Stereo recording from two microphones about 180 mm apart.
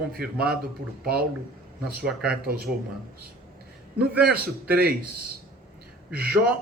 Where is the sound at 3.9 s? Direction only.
5° right (ahead or behind).